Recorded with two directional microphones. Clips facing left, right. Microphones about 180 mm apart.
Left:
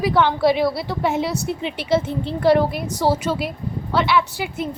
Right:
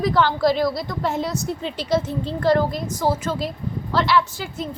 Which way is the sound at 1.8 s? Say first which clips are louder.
Left 2 dB; 60° left (ahead or behind).